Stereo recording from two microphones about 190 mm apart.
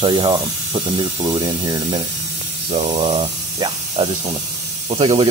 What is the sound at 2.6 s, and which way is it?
Speech, 30° right (ahead or behind).